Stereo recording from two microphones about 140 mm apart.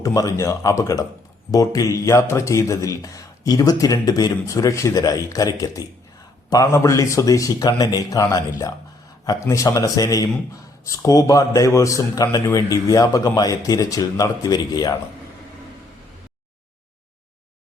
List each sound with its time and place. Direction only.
0.0 s a man's voice: 25° left (ahead or behind)